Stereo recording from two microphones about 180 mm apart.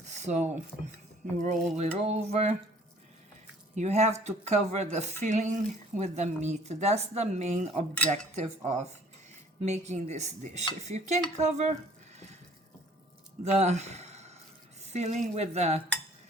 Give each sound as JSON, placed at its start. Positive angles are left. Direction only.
{"t": 0.0, "sound": "a sound", "side_deg": -40}
{"t": 1.4, "sound": "speech", "side_deg": -40}
{"t": 3.8, "sound": "speech", "side_deg": -40}
{"t": 7.9, "sound": "speech", "side_deg": 10}
{"t": 8.4, "sound": "speech", "side_deg": -40}
{"t": 13.4, "sound": "speech", "side_deg": -40}